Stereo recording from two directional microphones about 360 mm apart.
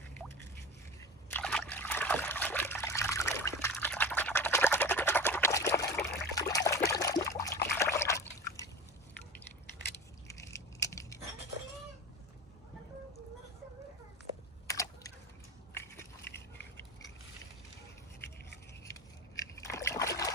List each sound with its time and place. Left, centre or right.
1.3 s trickle: centre
6.7 s water: centre
7.8 s trickle: centre
10.2 s a sound: centre
14.7 s a sound: centre
15.7 s biting: centre
16.2 s dog: left
19.7 s splash: centre